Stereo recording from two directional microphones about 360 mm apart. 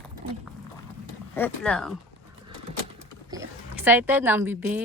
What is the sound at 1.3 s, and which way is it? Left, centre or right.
Speech, centre.